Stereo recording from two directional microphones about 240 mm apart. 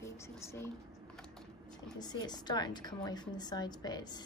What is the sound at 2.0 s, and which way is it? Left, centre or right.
A woman's voice, centre.